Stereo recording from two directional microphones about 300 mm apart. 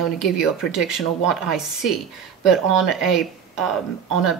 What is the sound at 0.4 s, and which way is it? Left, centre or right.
Speech, centre.